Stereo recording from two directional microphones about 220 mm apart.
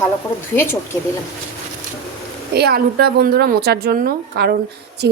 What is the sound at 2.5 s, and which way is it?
A woman's voice, 45° right (ahead or behind).